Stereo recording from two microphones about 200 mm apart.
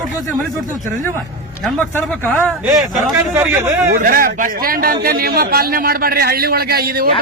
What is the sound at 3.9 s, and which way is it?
Speech, 40° right (ahead or behind).